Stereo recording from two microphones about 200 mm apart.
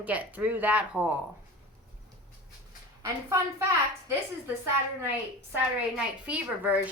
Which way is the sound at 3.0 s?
15° right (ahead or behind).